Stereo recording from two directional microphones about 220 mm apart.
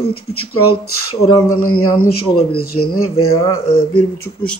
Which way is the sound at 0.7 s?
80° left.